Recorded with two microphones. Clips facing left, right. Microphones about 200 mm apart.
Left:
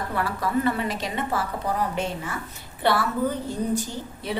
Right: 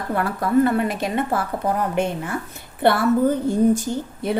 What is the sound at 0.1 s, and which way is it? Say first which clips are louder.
A woman's voice: right 7 dB; 50° right (ahead or behind).